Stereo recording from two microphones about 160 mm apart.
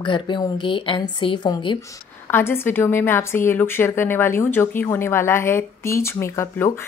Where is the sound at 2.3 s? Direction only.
15° left (ahead or behind).